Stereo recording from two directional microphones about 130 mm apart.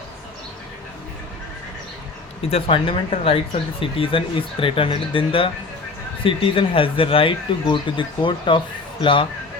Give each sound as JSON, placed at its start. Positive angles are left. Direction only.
{"t": 2.5, "sound": "speech", "side_deg": 45}